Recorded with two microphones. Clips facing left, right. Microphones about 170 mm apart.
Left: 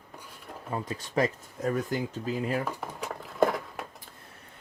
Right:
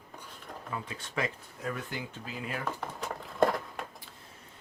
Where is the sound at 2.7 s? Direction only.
10° left (ahead or behind).